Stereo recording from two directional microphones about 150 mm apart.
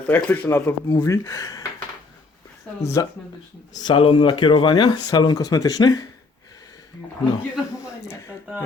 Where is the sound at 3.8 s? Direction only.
35° left (ahead or behind).